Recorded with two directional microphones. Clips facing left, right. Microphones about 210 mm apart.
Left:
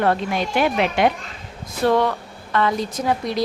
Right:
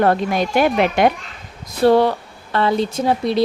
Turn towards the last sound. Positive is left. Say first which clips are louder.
# right 4 dB
turn(degrees=-30)  # may be behind; listen again after turning